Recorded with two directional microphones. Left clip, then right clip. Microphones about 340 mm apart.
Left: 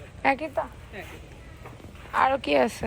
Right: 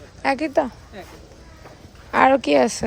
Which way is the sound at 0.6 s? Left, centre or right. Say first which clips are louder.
Right 9 dB; right.